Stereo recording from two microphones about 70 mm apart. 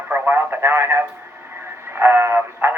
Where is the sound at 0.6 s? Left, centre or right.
Right.